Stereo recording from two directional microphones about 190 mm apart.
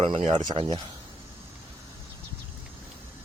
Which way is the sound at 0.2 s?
35° right (ahead or behind).